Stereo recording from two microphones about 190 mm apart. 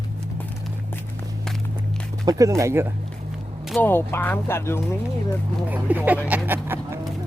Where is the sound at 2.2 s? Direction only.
20° right (ahead or behind).